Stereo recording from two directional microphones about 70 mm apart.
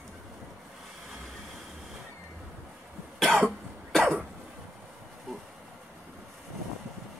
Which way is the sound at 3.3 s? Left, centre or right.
Centre.